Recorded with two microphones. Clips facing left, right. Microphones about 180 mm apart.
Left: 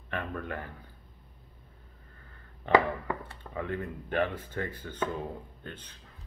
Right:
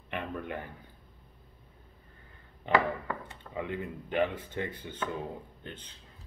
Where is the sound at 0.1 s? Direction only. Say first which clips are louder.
Even; 15° right (ahead or behind).